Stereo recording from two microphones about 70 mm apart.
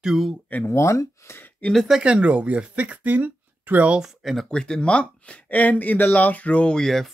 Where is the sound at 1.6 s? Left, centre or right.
Centre.